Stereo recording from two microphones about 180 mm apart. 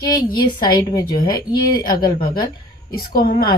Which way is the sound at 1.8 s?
55° left (ahead or behind).